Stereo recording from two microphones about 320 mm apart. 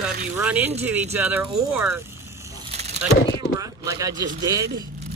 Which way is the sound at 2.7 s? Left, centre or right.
Right.